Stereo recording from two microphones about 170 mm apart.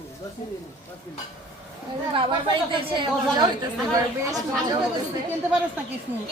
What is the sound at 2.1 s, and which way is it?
Speech, 30° right (ahead or behind).